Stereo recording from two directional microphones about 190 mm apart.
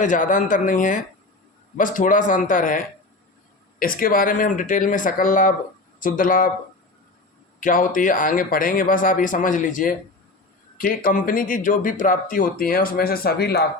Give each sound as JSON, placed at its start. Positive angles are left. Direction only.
{"t": 0.0, "sound": "speech", "side_deg": 45}
{"t": 7.6, "sound": "speech", "side_deg": 45}